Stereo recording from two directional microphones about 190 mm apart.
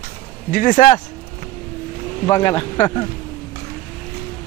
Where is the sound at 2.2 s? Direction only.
15° left (ahead or behind).